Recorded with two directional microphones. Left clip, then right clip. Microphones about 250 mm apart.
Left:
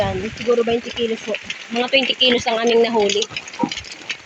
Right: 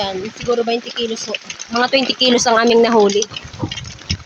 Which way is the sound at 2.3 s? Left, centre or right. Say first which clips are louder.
Right 6 dB; right.